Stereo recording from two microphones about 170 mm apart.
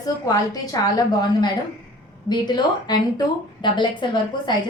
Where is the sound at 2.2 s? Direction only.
25° left (ahead or behind).